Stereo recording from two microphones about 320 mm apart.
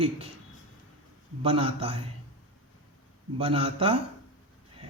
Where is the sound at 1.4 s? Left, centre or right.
Centre.